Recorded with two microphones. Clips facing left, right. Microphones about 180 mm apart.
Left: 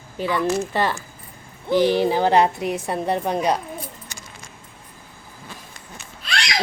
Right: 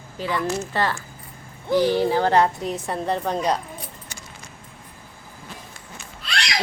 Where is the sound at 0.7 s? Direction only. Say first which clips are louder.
Left 2 dB; 15° left (ahead or behind).